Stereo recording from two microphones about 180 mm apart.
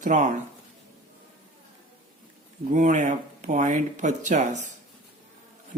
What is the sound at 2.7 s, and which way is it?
Speech, 45° right (ahead or behind).